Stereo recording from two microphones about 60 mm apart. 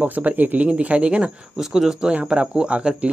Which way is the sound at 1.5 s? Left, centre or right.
Centre.